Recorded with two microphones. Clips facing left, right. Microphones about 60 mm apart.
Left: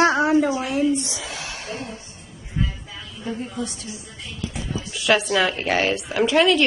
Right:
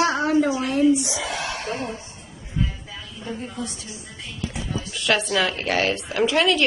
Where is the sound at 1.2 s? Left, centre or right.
Right.